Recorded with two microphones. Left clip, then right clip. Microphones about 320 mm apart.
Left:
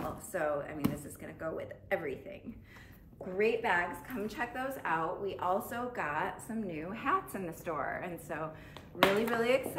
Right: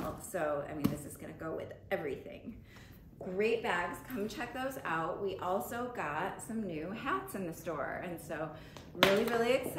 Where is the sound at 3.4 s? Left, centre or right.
Centre.